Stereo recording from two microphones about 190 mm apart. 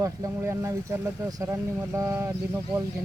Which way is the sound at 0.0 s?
15° right (ahead or behind).